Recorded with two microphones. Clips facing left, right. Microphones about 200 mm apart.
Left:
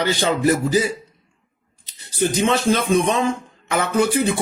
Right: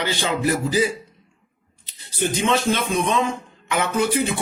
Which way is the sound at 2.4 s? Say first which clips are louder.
Left 2 dB; 35° left (ahead or behind).